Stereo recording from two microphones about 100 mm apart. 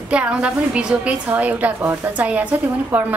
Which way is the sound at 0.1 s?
10° right (ahead or behind).